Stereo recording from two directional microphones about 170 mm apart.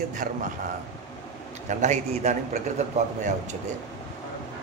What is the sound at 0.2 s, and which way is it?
Speech, 55° right (ahead or behind).